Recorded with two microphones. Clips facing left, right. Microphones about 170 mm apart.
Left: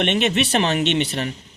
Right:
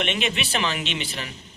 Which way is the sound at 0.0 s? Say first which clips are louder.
Left 7 dB; 55° left (ahead or behind).